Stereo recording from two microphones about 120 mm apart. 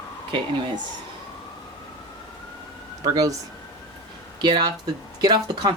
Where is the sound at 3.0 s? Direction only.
30° right (ahead or behind).